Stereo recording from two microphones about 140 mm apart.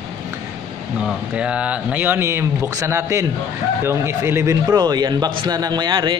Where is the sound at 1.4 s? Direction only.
10° right (ahead or behind); by 5.3 s 30° right (ahead or behind).